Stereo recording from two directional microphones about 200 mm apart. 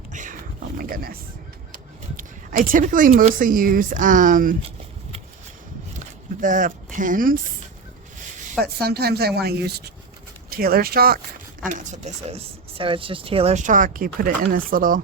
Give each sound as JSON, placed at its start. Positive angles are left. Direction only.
{"t": 0.1, "sound": "a sound", "side_deg": -40}
{"t": 0.8, "sound": "speech", "side_deg": -45}
{"t": 6.4, "sound": "speech", "side_deg": -40}
{"t": 8.5, "sound": "a woman's voice", "side_deg": -50}
{"t": 11.6, "sound": "speech", "side_deg": -35}